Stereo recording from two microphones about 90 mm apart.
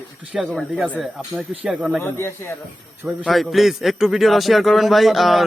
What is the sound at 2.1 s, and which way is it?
Speech, 25° left (ahead or behind).